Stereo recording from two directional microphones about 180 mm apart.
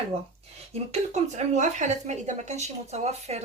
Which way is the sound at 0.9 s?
40° right (ahead or behind).